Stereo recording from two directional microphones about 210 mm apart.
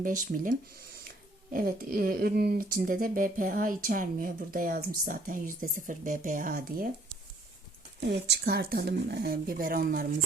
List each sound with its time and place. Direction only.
0.0 s speech: 40° right (ahead or behind)
1.5 s speech: 45° right (ahead or behind)
8.0 s speech: 50° right (ahead or behind)